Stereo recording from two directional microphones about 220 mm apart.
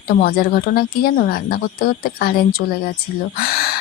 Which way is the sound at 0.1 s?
45° left (ahead or behind).